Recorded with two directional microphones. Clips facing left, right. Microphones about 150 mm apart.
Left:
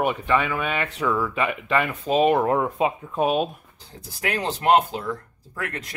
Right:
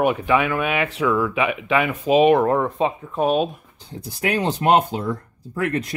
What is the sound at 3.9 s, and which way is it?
Speech, 20° right (ahead or behind).